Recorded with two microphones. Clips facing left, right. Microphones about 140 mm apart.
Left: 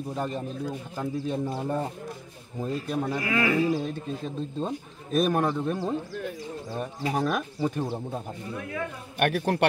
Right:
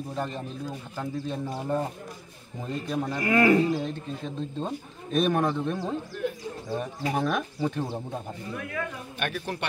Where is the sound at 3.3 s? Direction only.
35° right (ahead or behind).